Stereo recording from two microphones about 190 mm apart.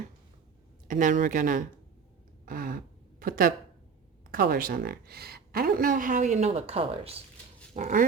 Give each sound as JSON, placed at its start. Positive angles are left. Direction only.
{"t": 0.9, "sound": "a woman's voice", "side_deg": -40}
{"t": 7.7, "sound": "a woman's voice", "side_deg": -45}